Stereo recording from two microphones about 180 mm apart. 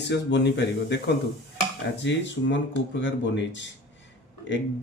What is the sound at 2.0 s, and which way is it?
Speech, 80° left.